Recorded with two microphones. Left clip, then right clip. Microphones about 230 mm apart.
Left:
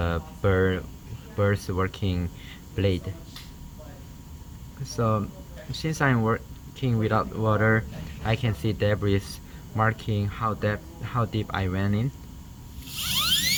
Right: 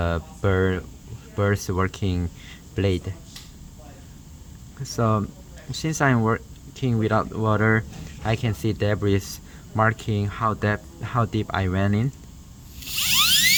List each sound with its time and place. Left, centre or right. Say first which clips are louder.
0.0 s speech: right 2 dB; right
4.8 s speech: right 3 dB; right